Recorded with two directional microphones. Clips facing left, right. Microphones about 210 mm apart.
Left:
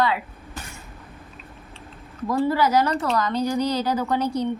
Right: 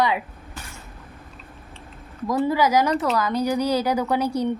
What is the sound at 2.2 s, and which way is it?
Speech, 15° right (ahead or behind).